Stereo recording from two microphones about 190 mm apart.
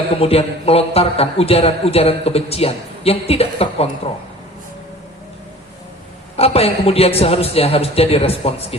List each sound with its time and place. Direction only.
0.2 s a man's voice: 30° left (ahead or behind)
6.3 s a man's voice: 30° left (ahead or behind)